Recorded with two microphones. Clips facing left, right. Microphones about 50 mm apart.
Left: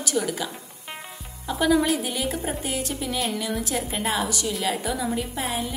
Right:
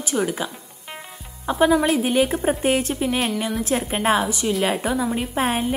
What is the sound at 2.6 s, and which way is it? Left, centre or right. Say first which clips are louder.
A woman's voice: right 8 dB; right.